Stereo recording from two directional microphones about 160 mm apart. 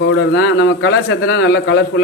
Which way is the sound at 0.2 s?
90° left.